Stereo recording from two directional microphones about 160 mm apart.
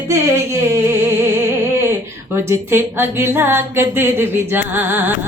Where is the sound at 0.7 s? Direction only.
15° right (ahead or behind).